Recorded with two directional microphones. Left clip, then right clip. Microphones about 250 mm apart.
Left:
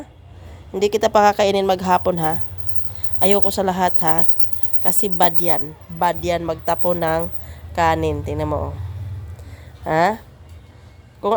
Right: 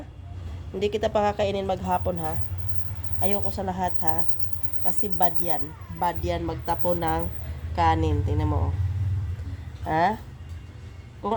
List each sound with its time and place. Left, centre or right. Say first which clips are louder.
0.8 s a woman's voice: left 9 dB; left
9.8 s a woman's voice: left 6 dB; left
11.2 s speech: left 9 dB; left